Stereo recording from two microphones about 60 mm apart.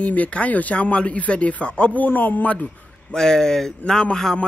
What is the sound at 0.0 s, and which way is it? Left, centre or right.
A man's voice, left.